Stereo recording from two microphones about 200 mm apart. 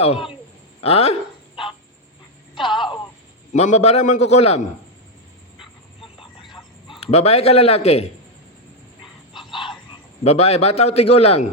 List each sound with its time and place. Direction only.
0.8 s speech: 30° left (ahead or behind)
2.6 s telephone: 25° left (ahead or behind)
3.5 s a man's voice: 35° left (ahead or behind)
6.1 s a sound: 25° left (ahead or behind)
9.5 s bird: 25° left (ahead or behind)
10.2 s a man's voice: 30° left (ahead or behind)